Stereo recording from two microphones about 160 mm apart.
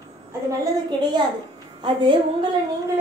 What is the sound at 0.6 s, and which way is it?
Speech, 25° right (ahead or behind).